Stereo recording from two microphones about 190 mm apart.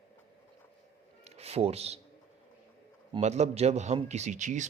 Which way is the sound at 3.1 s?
35° right (ahead or behind).